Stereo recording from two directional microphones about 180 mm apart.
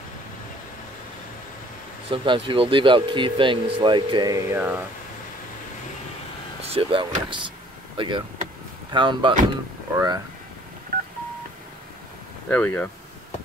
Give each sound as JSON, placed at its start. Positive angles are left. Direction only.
{"t": 2.0, "sound": "speech", "side_deg": -25}
{"t": 6.6, "sound": "speech", "side_deg": -35}
{"t": 10.9, "sound": "telephone dialing", "side_deg": -55}
{"t": 12.4, "sound": "speech", "side_deg": 10}